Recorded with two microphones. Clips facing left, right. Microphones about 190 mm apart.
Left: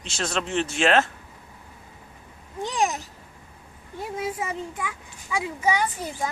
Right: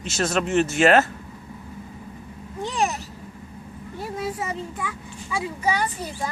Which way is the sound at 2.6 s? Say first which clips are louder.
Even; 15° left (ahead or behind).